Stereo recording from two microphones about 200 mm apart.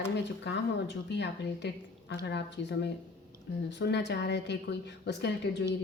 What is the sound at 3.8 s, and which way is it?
A woman's voice, 60° left (ahead or behind).